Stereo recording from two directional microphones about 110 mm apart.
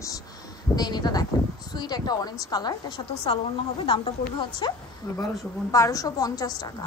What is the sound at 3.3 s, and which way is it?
A woman's voice, 50° left (ahead or behind).